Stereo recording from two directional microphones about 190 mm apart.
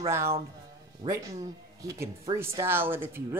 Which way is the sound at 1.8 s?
15° right (ahead or behind).